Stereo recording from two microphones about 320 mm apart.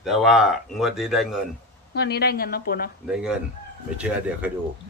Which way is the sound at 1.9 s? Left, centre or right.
Left.